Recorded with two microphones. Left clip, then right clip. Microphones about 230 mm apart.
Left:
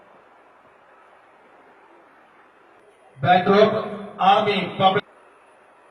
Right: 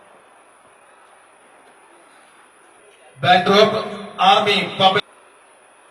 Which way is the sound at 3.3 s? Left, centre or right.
Centre.